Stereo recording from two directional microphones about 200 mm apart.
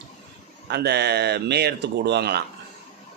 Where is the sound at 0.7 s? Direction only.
55° right (ahead or behind).